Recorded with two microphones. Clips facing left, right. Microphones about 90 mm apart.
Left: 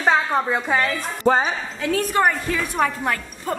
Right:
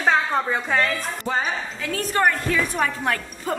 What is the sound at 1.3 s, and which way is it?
Speech, 70° left (ahead or behind).